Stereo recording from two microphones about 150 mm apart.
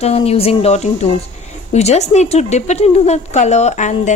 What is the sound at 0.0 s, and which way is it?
Speech, 45° left (ahead or behind).